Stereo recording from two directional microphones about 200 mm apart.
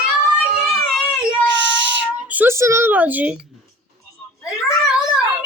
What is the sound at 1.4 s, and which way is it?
Child singing, 65° right (ahead or behind).